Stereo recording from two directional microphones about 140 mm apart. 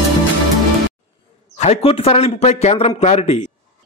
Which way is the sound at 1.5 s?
45° left (ahead or behind).